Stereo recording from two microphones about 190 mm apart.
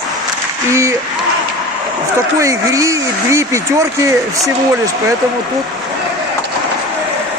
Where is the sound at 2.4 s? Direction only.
15° right (ahead or behind).